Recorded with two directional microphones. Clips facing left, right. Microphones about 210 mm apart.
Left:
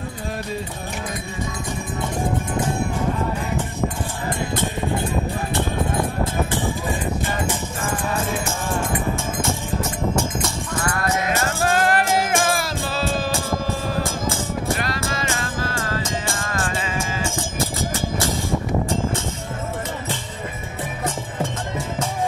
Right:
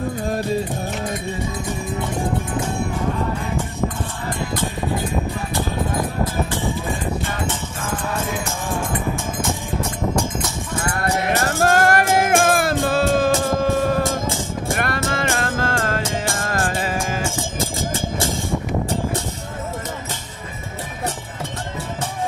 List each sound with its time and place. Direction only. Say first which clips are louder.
8.1 s music: left 1 dB; centre (ahead or behind)
11.6 s music: right 3 dB; 45° right (ahead or behind)